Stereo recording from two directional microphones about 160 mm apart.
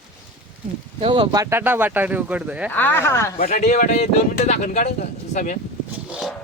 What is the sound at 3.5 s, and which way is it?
Speech, 50° left (ahead or behind).